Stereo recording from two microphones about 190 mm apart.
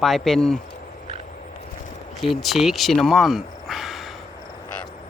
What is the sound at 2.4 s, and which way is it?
Speech, centre (ahead or behind).